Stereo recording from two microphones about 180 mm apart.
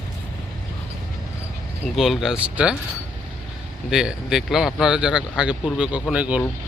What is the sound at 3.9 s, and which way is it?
Speech, 5° right (ahead or behind).